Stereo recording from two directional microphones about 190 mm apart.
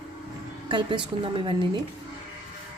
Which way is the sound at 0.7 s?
25° right (ahead or behind).